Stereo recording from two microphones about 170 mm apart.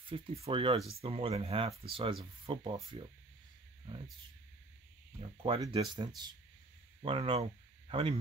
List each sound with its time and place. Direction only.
0.0 s speech: 30° right (ahead or behind)
5.4 s speech: 30° right (ahead or behind)